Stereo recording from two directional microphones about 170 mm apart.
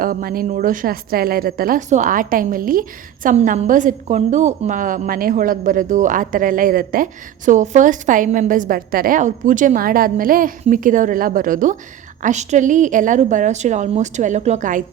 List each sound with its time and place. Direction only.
0.0 s a woman's voice: 55° right (ahead or behind)